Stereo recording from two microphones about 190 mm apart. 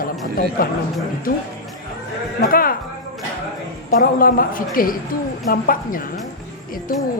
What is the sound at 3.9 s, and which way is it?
Speech, 50° left (ahead or behind).